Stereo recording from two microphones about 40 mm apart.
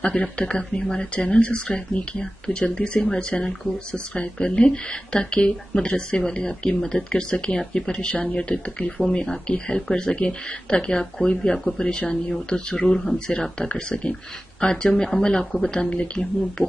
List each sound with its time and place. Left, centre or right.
0.1 s speech: left
15.9 s speech: left